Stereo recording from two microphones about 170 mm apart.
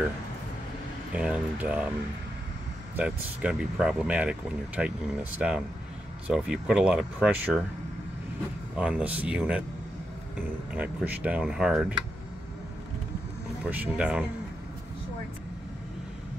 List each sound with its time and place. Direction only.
1.1 s speech: 5° right (ahead or behind)
3.0 s speech: 5° right (ahead or behind)
8.7 s speech: 5° right (ahead or behind)
13.7 s speech: 10° right (ahead or behind)